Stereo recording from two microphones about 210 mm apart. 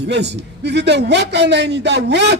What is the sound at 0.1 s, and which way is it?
Speech, 55° right (ahead or behind).